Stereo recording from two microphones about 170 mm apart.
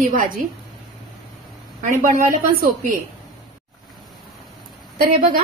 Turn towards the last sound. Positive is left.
turn(degrees=-55)  # may be behind; listen again after turning